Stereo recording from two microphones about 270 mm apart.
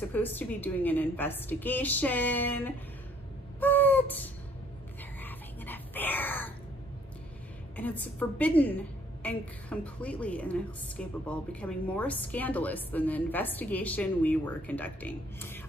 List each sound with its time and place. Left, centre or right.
0.1 s a woman's voice: centre
3.5 s owl: centre
5.2 s a sound: centre
7.7 s a woman's voice: centre